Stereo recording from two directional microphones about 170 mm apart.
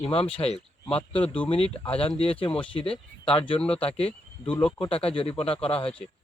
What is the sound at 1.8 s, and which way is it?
Speech, 35° left (ahead or behind).